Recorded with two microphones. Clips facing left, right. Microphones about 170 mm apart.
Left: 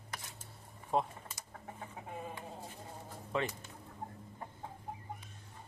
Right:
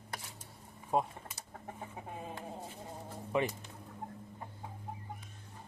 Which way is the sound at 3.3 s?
15° right (ahead or behind).